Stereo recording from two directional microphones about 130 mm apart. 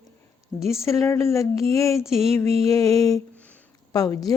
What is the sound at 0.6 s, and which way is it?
Speech, centre (ahead or behind).